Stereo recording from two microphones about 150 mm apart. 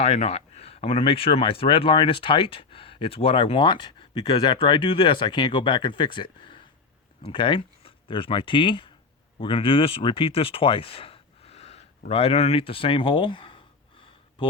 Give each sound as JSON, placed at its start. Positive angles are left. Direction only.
{"t": 0.0, "sound": "speech", "side_deg": 45}